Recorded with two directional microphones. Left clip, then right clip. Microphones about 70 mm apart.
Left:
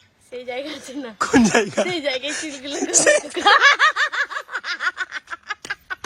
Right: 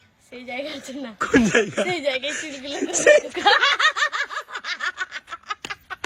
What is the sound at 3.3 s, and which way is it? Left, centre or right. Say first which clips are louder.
Snicker: left 3 dB; left.